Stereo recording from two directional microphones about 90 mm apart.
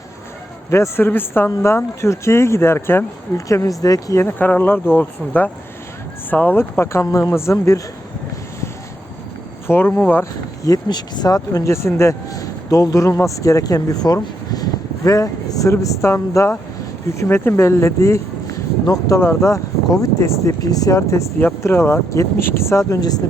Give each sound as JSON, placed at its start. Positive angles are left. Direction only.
{"t": 0.7, "sound": "speech", "side_deg": 30}
{"t": 4.2, "sound": "speech", "side_deg": 25}
{"t": 9.6, "sound": "speech", "side_deg": 25}
{"t": 10.8, "sound": "speech", "side_deg": 50}
{"t": 19.2, "sound": "speech", "side_deg": 30}